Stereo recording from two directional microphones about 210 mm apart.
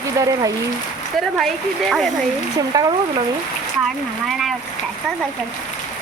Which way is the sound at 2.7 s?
15° right (ahead or behind).